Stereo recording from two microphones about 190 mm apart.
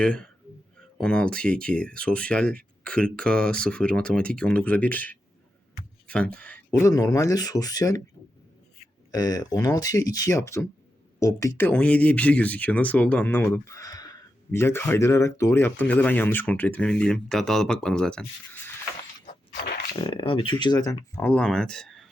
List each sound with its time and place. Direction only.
0.0 s speech: 5° left (ahead or behind)
9.1 s speech: 20° left (ahead or behind); by 18.6 s 5° left (ahead or behind)
20.0 s speech: 25° left (ahead or behind)
21.2 s speech: 5° left (ahead or behind)